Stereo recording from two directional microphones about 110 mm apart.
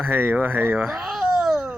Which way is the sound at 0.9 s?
Centre (ahead or behind).